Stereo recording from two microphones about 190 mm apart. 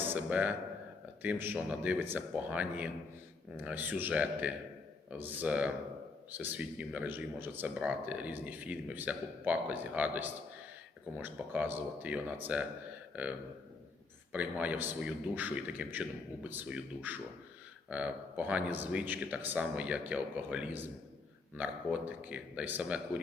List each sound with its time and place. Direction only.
0.0 s a man's voice: 10° right (ahead or behind)
14.3 s speech: 10° right (ahead or behind)